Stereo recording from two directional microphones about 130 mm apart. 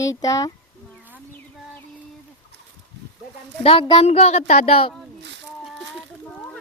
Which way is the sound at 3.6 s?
45° left (ahead or behind).